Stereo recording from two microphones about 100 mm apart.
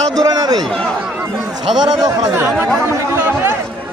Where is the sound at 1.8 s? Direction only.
45° right (ahead or behind).